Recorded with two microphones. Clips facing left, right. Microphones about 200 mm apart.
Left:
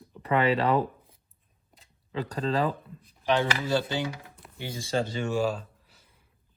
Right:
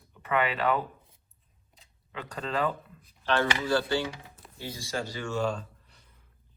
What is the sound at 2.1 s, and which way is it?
Speech, 35° left (ahead or behind).